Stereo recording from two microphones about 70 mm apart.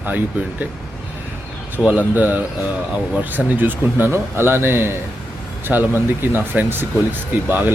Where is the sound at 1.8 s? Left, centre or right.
Right.